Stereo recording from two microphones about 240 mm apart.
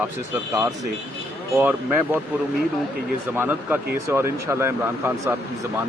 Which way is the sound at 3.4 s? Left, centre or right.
Centre.